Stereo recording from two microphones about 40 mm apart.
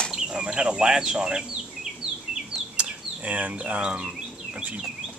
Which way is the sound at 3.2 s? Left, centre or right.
Right.